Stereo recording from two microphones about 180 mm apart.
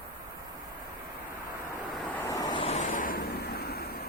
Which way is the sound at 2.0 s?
10° left (ahead or behind).